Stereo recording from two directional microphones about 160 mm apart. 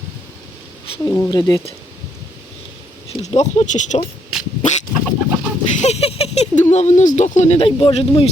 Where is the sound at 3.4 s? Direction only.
50° left (ahead or behind).